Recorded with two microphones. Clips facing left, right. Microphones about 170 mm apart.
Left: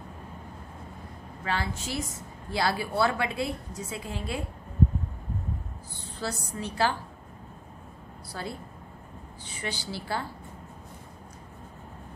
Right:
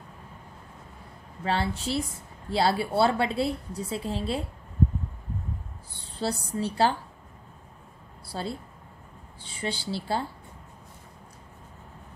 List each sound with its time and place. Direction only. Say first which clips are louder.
1.4 s a woman's voice: right 4 dB; 30° right (ahead or behind)
5.9 s a woman's voice: right 4 dB; 30° right (ahead or behind)
8.3 s speech: right 3 dB; 30° right (ahead or behind)
9.6 s a woman's voice: right 4 dB; 30° right (ahead or behind)